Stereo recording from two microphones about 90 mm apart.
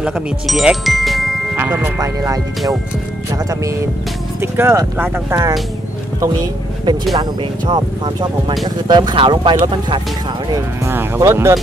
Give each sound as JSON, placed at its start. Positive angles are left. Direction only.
{"t": 0.0, "sound": "speech", "side_deg": -5}
{"t": 1.6, "sound": "speech", "side_deg": -25}
{"t": 2.0, "sound": "speech", "side_deg": -40}
{"t": 4.4, "sound": "speech", "side_deg": -25}
{"t": 5.3, "sound": "speech", "side_deg": -40}
{"t": 7.2, "sound": "speech", "side_deg": -55}
{"t": 9.1, "sound": "speech", "side_deg": -75}
{"t": 11.1, "sound": "speech", "side_deg": -35}